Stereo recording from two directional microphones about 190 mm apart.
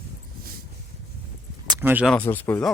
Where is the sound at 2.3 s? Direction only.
10° left (ahead or behind).